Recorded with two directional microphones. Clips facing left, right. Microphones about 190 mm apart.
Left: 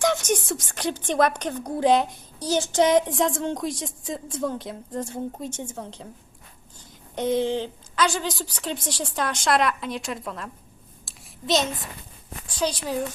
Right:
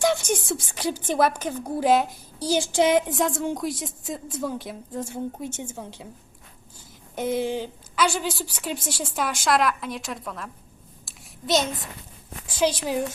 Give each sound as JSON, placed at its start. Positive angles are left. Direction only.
{"t": 0.0, "sound": "a woman's voice", "side_deg": -10}
{"t": 7.2, "sound": "a woman's voice", "side_deg": -5}
{"t": 11.0, "sound": "a sound", "side_deg": 0}